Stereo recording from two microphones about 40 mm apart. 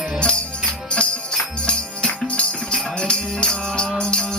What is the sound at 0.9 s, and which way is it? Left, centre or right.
Music, left.